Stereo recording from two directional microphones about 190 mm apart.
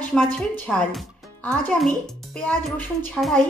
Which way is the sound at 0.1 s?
Centre (ahead or behind).